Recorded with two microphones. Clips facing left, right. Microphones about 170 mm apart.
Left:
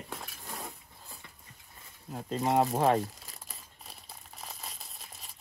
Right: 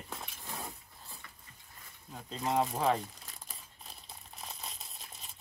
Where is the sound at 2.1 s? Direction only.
45° left (ahead or behind).